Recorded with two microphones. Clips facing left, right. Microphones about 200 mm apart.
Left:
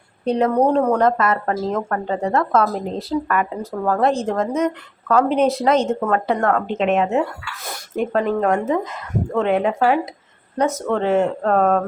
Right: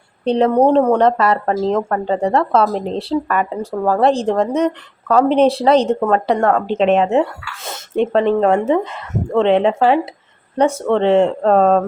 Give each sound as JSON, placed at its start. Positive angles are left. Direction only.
{"t": 0.3, "sound": "speech", "side_deg": -30}